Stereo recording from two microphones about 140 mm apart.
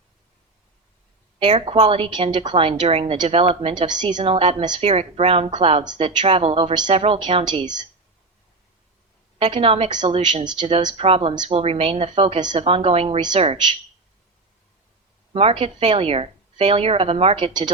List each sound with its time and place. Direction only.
1.4 s a woman's voice: 40° right (ahead or behind)
4.8 s a woman's voice: 45° right (ahead or behind)
5.8 s a woman's voice: 30° right (ahead or behind)
6.1 s a woman's voice: 45° right (ahead or behind)
9.4 s a woman's voice: 40° right (ahead or behind)
10.4 s a woman's voice: 30° right (ahead or behind)
10.8 s a woman's voice: 45° right (ahead or behind)
15.3 s a woman's voice: 45° right (ahead or behind)